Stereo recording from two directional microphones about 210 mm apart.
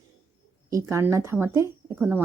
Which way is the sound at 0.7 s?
15° right (ahead or behind).